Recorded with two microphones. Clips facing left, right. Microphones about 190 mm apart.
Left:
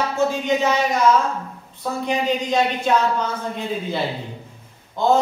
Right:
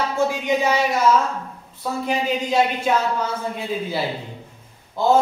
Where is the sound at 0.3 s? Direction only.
10° right (ahead or behind).